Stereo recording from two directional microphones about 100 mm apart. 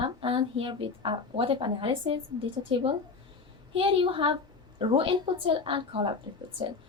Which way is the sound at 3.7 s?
60° right (ahead or behind).